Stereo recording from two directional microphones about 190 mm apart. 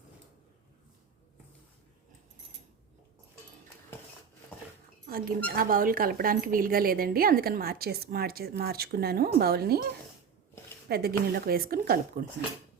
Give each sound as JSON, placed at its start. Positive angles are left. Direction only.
{"t": 5.1, "sound": "dishes", "side_deg": -50}
{"t": 5.5, "sound": "a woman's voice", "side_deg": -50}